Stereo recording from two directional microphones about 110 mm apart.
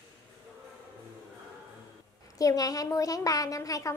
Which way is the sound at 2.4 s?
30° left (ahead or behind).